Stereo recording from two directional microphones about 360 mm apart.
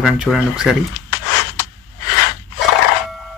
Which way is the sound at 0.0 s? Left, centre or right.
Centre.